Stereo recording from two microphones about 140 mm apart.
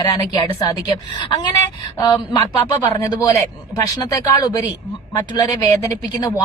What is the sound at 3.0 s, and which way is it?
Speech, 25° left (ahead or behind).